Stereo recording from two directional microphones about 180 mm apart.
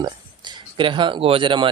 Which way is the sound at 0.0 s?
25° right (ahead or behind).